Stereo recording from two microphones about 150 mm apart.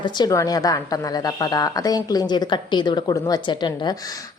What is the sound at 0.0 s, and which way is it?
Speech, 25° left (ahead or behind).